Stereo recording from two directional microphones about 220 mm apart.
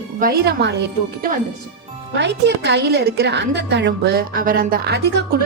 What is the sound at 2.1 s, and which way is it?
A woman's voice, 50° right (ahead or behind).